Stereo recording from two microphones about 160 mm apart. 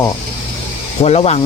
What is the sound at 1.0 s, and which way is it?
Speech, 40° left (ahead or behind).